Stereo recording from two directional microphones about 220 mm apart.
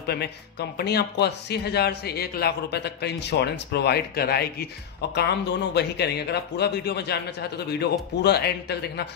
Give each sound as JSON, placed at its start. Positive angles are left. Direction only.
{"t": 0.0, "sound": "speech", "side_deg": 45}